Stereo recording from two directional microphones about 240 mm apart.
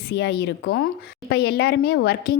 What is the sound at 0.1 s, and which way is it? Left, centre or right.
A woman's voice, left.